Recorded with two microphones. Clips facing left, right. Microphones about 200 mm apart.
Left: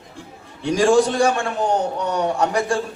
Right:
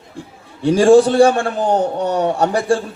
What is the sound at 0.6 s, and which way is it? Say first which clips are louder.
A man's voice: right 6 dB; 35° right (ahead or behind).